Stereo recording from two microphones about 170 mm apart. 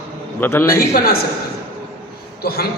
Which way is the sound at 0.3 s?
10° left (ahead or behind).